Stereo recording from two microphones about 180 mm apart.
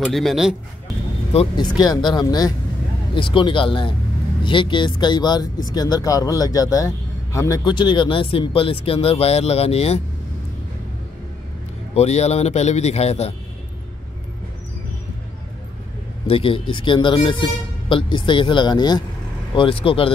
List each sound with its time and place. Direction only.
0.0 s speech: centre (ahead or behind)
1.3 s speech: 35° left (ahead or behind)
1.8 s speech: 25° left (ahead or behind)
11.9 s speech: 35° left (ahead or behind)
16.3 s speech: 30° left (ahead or behind)